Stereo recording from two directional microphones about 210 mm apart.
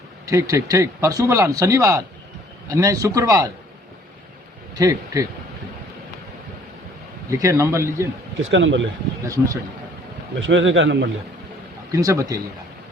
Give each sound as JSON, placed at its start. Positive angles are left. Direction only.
{"t": 0.3, "sound": "speech", "side_deg": -15}
{"t": 4.7, "sound": "speech", "side_deg": -15}
{"t": 7.3, "sound": "speech", "side_deg": -15}
{"t": 8.4, "sound": "a man's voice", "side_deg": -65}
{"t": 9.2, "sound": "speech", "side_deg": -15}
{"t": 10.4, "sound": "a man's voice", "side_deg": -60}
{"t": 11.9, "sound": "speech", "side_deg": -15}